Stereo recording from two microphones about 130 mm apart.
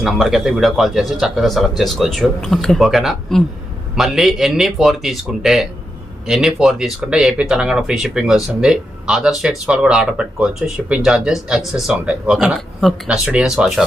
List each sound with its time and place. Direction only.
0.0 s speech: centre (ahead or behind)